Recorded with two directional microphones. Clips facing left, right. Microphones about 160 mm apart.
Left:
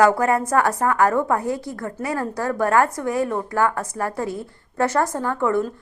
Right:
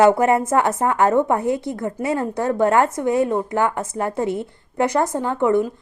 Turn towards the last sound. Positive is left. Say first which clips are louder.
# right 3 dB
turn(degrees=-20)  # may be behind; listen again after turning